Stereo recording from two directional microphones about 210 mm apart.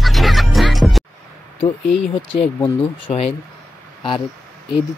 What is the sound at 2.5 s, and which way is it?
Speech, 20° left (ahead or behind).